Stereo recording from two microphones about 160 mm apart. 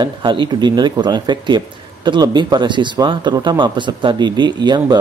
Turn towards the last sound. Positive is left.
turn(degrees=-25)  # may be behind; listen again after turning